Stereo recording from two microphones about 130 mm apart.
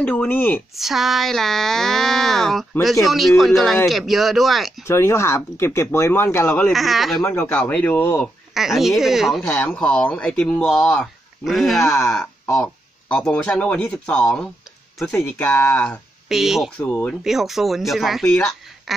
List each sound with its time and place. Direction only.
0.0 s speech: 10° left (ahead or behind)
0.7 s speech: centre (ahead or behind)
4.8 s speech: 20° left (ahead or behind)
6.7 s speech: centre (ahead or behind)
7.2 s speech: 15° left (ahead or behind)
8.5 s speech: centre (ahead or behind)
9.6 s speech: 10° left (ahead or behind)
13.1 s speech: 10° left (ahead or behind)
16.3 s speech: centre (ahead or behind)
16.7 s speech: 10° left (ahead or behind)
17.2 s speech: centre (ahead or behind)
18.9 s duck: centre (ahead or behind)